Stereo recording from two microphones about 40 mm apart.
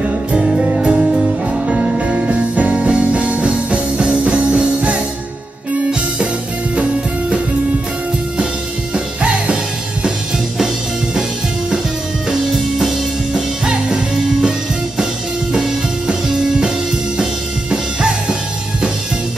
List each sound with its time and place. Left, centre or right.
0.0 s music: right
6.7 s music: right
8.9 s music: right
12.3 s music: centre
15.5 s music: centre